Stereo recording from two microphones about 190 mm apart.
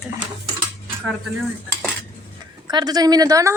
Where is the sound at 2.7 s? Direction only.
20° right (ahead or behind).